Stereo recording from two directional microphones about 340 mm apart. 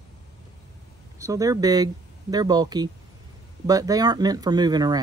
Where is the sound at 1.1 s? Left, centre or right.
Centre.